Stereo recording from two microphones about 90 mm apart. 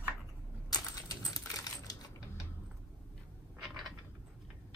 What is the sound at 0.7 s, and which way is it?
Typing, 45° left (ahead or behind).